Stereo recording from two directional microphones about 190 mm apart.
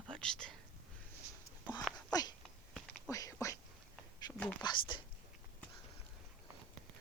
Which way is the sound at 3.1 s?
20° left (ahead or behind).